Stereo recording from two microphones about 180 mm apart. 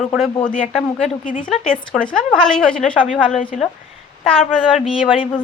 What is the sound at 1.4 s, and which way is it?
A woman's voice, 5° left (ahead or behind).